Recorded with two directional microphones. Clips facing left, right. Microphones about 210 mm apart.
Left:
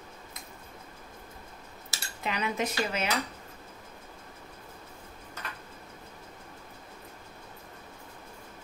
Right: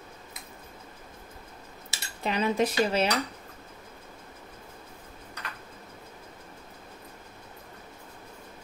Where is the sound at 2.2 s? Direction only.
30° right (ahead or behind).